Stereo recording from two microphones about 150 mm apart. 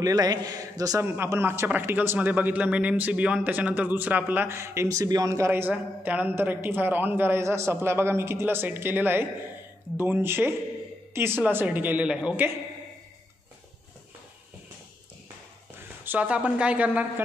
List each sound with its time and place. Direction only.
0.0 s a man's voice: 25° right (ahead or behind)
16.0 s speech: 10° right (ahead or behind)